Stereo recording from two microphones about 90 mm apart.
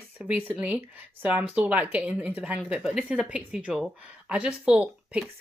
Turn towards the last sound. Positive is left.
turn(degrees=-10)  # may be behind; listen again after turning